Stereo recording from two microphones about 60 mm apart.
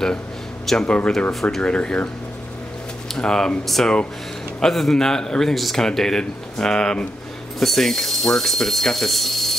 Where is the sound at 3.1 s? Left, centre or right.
Centre.